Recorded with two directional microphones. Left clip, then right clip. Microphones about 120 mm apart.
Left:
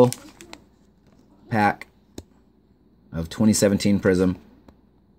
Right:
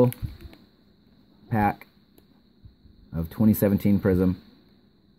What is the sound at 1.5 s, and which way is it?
Speech, 15° right (ahead or behind).